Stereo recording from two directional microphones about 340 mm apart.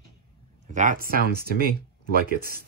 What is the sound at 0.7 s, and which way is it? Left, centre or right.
Speech, right.